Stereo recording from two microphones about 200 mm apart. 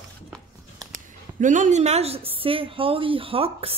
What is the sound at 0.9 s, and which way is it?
A woman's voice, 40° right (ahead or behind).